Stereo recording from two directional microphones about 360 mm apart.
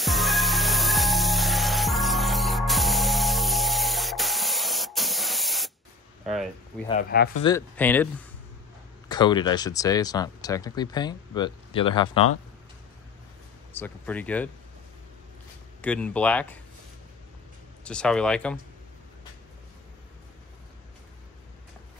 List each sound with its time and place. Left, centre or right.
0.0 s music: centre
6.2 s a sound: centre
6.9 s speech: left
7.4 s speech: centre
9.1 s speech: centre
13.7 s speech: centre
15.8 s speech: centre
17.8 s speech: centre